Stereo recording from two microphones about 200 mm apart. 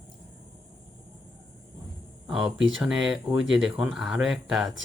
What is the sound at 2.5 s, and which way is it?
Speech, 70° right (ahead or behind).